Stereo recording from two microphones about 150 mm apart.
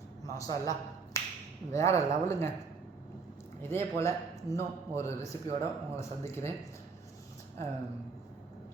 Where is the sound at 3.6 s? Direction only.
15° left (ahead or behind).